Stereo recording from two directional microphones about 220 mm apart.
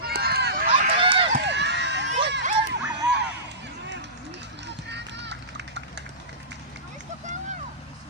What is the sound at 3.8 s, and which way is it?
Run, 50° right (ahead or behind).